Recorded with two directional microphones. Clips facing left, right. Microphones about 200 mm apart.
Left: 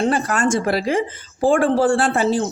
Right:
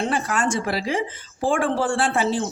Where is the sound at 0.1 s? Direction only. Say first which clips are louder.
Left 4 dB; 45° left (ahead or behind).